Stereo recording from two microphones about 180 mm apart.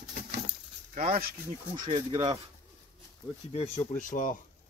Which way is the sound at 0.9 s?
40° right (ahead or behind).